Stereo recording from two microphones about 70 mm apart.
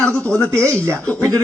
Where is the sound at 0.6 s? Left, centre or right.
Right.